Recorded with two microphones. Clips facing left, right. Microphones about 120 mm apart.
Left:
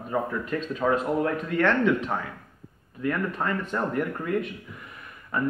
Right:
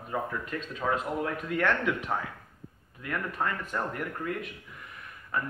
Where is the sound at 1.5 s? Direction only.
10° right (ahead or behind).